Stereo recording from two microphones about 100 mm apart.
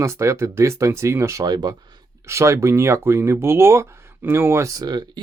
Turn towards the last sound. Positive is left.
turn(degrees=-40)  # may be behind; listen again after turning